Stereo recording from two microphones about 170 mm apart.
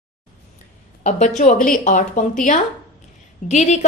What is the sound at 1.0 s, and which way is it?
Speech, 45° left (ahead or behind).